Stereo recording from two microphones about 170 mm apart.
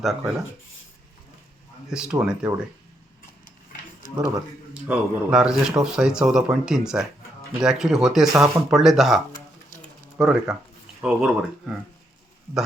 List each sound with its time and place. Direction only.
0.0 s speech: centre (ahead or behind)
1.9 s speech: 5° right (ahead or behind)
2.5 s speech: 20° right (ahead or behind)
4.7 s speech: 5° right (ahead or behind)